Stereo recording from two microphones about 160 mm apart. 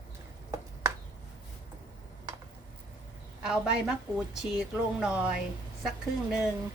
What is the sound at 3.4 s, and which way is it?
A woman's voice, 5° right (ahead or behind).